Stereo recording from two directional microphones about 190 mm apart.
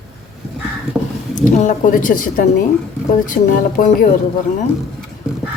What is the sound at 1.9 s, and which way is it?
Speech, 45° left (ahead or behind).